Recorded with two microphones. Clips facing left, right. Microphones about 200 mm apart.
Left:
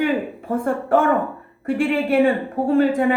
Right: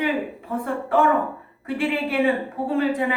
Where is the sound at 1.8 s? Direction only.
50° left (ahead or behind).